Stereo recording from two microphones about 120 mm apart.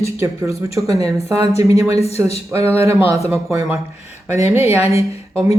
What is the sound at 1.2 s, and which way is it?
Speech, 60° left (ahead or behind).